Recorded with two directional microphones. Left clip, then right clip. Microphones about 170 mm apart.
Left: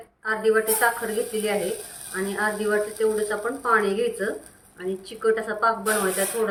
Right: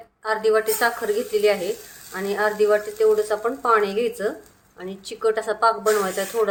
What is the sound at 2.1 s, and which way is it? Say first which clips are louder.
Speech: right 3 dB; 75° right (ahead or behind).